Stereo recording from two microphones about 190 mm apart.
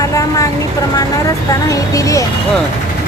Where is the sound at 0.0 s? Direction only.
15° left (ahead or behind).